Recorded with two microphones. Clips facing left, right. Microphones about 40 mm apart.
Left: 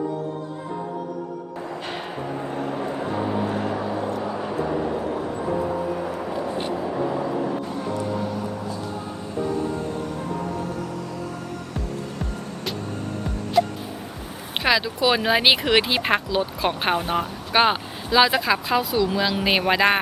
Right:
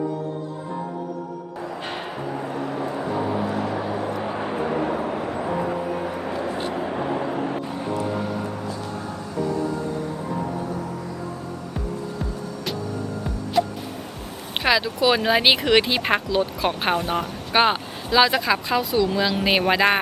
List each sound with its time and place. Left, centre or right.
1.8 s a sound: centre
2.7 s vehicle: centre
3.8 s vehicle: centre
4.2 s vehicle: right
6.1 s vehicle: right
7.3 s vehicle: right
14.6 s speech: centre
17.5 s speech: centre